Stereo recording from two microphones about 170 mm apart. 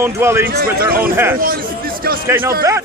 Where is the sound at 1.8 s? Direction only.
60° right (ahead or behind).